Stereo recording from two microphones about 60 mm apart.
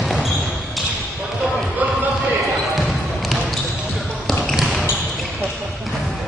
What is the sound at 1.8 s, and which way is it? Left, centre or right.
Basketball bounce, right.